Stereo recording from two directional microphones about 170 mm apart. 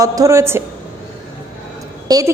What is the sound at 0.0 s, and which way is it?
Speech, 20° right (ahead or behind).